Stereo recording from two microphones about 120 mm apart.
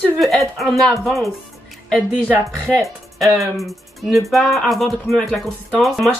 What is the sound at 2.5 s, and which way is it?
Speech, 25° right (ahead or behind).